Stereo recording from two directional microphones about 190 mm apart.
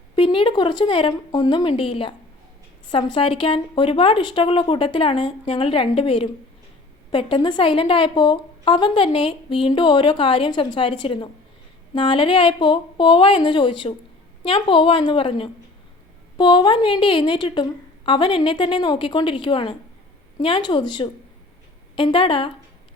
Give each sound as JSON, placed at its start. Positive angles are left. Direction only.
{"t": 0.2, "sound": "a woman's voice", "side_deg": 25}